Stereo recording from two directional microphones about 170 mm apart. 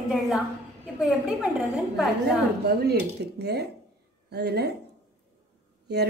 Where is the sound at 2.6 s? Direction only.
70° right (ahead or behind).